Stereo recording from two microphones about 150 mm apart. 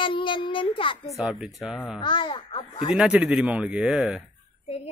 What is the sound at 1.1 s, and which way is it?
Speech, 5° right (ahead or behind).